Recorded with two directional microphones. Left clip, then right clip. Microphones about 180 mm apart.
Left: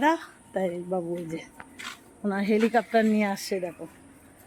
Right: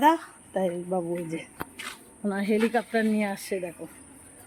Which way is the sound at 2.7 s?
30° left (ahead or behind).